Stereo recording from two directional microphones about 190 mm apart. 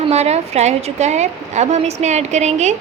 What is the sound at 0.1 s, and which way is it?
Speech, 35° right (ahead or behind).